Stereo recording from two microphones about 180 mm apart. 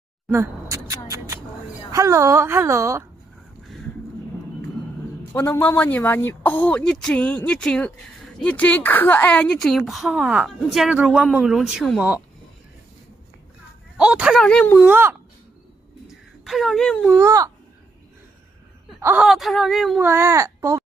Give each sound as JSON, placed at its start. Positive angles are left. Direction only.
{"t": 0.3, "sound": "a sound", "side_deg": -15}
{"t": 1.9, "sound": "a woman's voice", "side_deg": -15}
{"t": 5.3, "sound": "a woman's voice", "side_deg": 10}
{"t": 13.9, "sound": "speech", "side_deg": -5}
{"t": 14.9, "sound": "a woman's voice", "side_deg": -15}
{"t": 16.4, "sound": "speech", "side_deg": 0}
{"t": 17.1, "sound": "a woman's voice", "side_deg": -15}
{"t": 18.9, "sound": "speech", "side_deg": -15}
{"t": 19.2, "sound": "speech", "side_deg": 0}
{"t": 20.1, "sound": "a woman's voice", "side_deg": -15}